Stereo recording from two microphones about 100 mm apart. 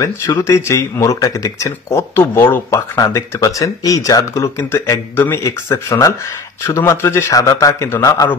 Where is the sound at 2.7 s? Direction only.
35° left (ahead or behind).